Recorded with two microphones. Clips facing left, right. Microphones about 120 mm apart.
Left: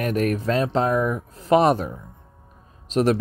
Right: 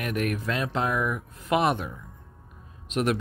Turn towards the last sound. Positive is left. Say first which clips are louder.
# left 6 dB
turn(degrees=35)  # may be behind; listen again after turning